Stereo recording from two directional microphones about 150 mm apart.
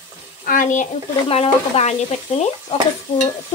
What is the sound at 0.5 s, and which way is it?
Frying, 60° left (ahead or behind).